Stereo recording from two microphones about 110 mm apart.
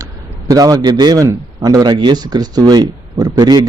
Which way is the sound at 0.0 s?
30° right (ahead or behind).